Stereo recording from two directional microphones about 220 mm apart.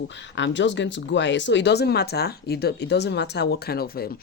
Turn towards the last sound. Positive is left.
turn(degrees=45)  # may be behind; listen again after turning